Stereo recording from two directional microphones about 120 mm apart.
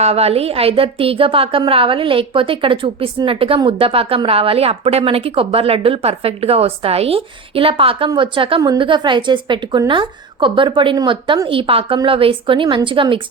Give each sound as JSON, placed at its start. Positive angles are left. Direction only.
{"t": 0.0, "sound": "a woman's voice", "side_deg": -60}